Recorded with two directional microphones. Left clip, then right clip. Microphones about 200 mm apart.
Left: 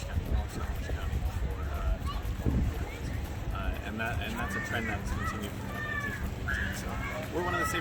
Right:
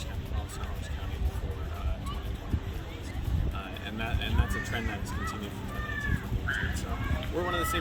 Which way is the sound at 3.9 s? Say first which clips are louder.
Left 1 dB; centre (ahead or behind).